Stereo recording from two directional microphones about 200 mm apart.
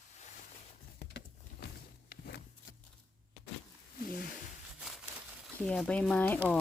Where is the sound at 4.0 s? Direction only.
45° left (ahead or behind).